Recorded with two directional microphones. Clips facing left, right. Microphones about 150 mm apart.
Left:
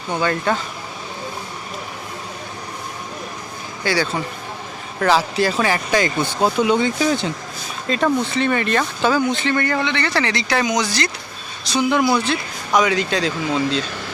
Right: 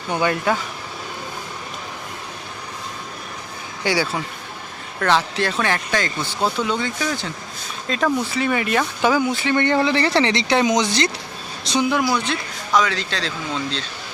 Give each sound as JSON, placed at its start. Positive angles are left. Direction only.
{"t": 0.1, "sound": "speech", "side_deg": -15}
{"t": 3.8, "sound": "speech", "side_deg": -10}
{"t": 4.9, "sound": "speech", "side_deg": 5}
{"t": 7.9, "sound": "speech", "side_deg": 0}
{"t": 9.6, "sound": "speech", "side_deg": -25}
{"t": 12.1, "sound": "speech", "side_deg": 5}
{"t": 12.7, "sound": "speech", "side_deg": 15}